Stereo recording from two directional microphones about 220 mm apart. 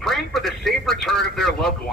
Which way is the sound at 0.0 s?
Centre (ahead or behind).